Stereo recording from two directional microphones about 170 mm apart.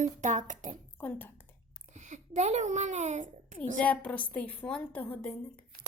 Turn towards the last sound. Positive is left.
turn(degrees=10)  # may be behind; listen again after turning